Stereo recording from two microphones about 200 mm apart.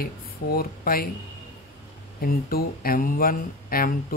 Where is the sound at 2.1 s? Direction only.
45° left (ahead or behind).